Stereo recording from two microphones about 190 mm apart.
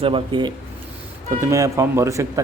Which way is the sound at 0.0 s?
25° right (ahead or behind).